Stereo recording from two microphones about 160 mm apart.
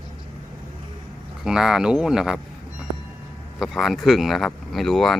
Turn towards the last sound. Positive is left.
turn(degrees=0)  # may be behind; listen again after turning